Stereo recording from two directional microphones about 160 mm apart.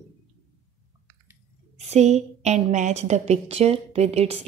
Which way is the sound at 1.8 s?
45° right (ahead or behind).